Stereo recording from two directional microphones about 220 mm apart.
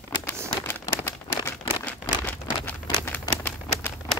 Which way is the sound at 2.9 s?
10° left (ahead or behind).